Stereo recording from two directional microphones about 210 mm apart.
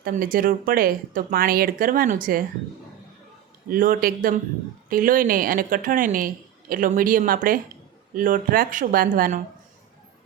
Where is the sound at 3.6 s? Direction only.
40° right (ahead or behind).